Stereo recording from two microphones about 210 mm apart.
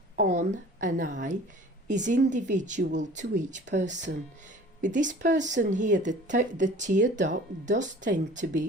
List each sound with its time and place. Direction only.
0.3 s speech: 35° right (ahead or behind)